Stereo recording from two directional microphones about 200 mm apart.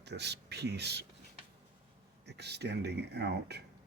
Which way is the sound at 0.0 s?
60° right (ahead or behind).